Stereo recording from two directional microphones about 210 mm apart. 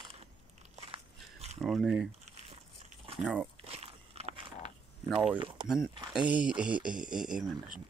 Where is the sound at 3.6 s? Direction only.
25° right (ahead or behind).